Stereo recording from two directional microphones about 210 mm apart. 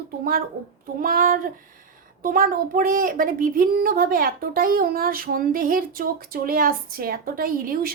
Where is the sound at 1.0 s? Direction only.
40° right (ahead or behind).